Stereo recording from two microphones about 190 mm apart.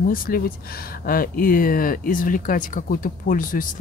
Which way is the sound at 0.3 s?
50° left (ahead or behind).